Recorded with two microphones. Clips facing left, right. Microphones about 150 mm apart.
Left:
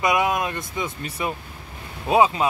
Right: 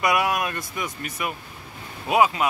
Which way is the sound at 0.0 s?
20° left (ahead or behind).